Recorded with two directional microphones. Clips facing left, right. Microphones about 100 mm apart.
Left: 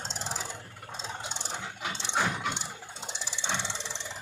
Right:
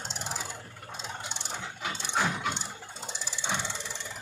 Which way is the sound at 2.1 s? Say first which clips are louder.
Even; centre (ahead or behind).